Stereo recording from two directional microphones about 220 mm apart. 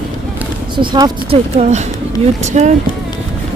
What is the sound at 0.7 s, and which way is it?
Speech, 20° right (ahead or behind).